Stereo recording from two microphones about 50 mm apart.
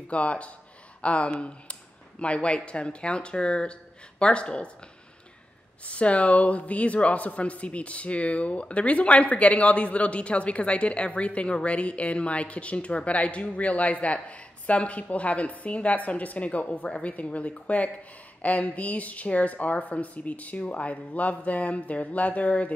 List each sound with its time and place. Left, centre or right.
0.1 s a man's voice: left
5.9 s a man's voice: left